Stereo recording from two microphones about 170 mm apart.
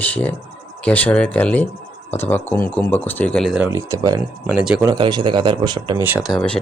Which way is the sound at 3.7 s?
15° right (ahead or behind).